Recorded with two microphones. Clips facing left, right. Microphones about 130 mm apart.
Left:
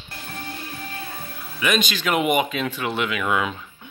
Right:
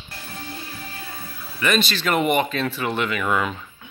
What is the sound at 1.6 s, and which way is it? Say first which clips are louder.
Speech: right 1 dB; 5° left (ahead or behind).